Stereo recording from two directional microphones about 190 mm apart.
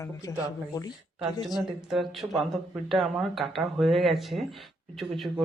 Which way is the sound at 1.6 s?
Centre (ahead or behind).